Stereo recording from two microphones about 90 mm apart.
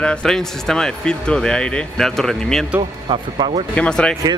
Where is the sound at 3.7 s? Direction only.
10° left (ahead or behind).